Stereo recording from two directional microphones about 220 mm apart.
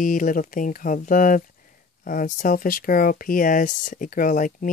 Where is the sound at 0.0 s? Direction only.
35° left (ahead or behind).